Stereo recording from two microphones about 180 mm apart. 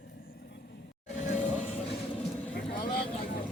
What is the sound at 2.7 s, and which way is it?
Vehicle, 30° left (ahead or behind).